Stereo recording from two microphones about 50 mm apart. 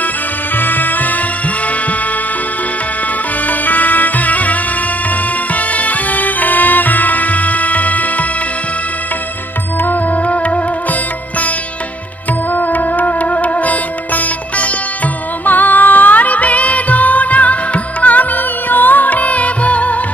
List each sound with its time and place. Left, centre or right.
0.6 s music: left
3.4 s music: left
9.8 s music: left
12.5 s music: left